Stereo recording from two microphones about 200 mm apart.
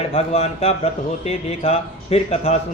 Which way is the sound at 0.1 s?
35° left (ahead or behind).